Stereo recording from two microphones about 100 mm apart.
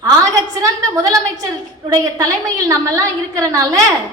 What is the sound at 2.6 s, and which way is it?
A woman's voice, 35° right (ahead or behind).